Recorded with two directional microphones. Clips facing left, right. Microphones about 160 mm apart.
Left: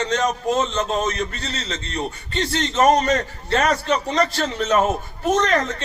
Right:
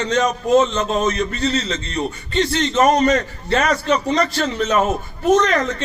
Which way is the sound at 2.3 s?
35° left (ahead or behind).